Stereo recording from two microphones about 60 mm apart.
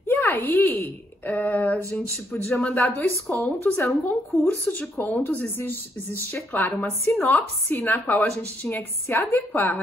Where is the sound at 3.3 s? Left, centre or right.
Left.